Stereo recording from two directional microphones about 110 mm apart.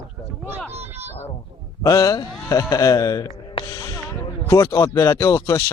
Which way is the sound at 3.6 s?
30° left (ahead or behind).